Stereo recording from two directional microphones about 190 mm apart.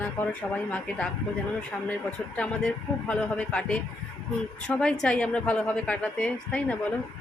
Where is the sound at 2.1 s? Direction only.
5° left (ahead or behind).